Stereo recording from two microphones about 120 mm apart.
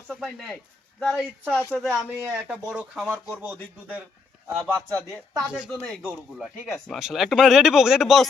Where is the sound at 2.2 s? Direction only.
20° right (ahead or behind).